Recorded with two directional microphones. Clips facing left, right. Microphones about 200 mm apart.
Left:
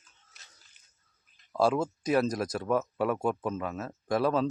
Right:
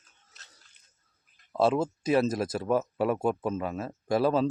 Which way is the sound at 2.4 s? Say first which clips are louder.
Right 2 dB; 25° right (ahead or behind).